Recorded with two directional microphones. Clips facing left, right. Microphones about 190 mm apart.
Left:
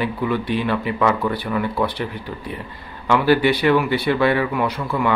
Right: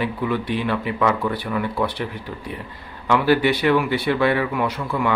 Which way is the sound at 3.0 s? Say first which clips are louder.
Left 1 dB; 30° left (ahead or behind).